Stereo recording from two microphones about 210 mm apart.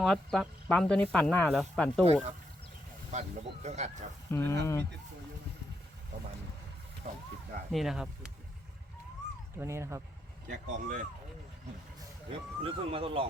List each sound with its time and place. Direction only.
0.0 s speech: centre (ahead or behind)
3.1 s speech: 35° right (ahead or behind)
4.3 s speech: 10° left (ahead or behind)
7.1 s speech: 50° right (ahead or behind)
7.7 s speech: centre (ahead or behind)
9.6 s speech: 15° right (ahead or behind)
10.5 s speech: 40° right (ahead or behind)
12.6 s speech: 25° right (ahead or behind)